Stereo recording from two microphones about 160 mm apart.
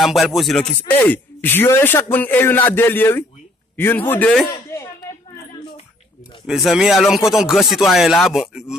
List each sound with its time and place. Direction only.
0.0 s speech: centre (ahead or behind)
0.8 s speech: 10° left (ahead or behind)
4.5 s a sound: 20° left (ahead or behind)
6.4 s speech: centre (ahead or behind)